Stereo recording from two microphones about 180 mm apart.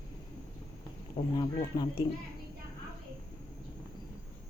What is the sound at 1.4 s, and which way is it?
Speech, 25° left (ahead or behind).